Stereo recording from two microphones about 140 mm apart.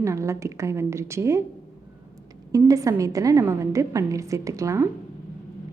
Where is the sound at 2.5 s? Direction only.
25° right (ahead or behind).